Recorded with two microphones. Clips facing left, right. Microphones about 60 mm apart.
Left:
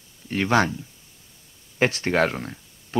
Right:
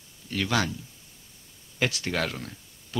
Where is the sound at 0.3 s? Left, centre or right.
Left.